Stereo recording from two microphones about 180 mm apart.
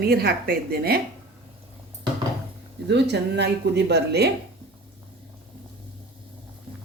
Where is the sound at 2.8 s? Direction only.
70° right (ahead or behind).